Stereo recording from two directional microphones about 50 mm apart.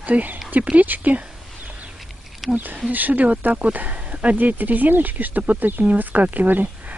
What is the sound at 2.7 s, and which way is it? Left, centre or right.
Speech, right.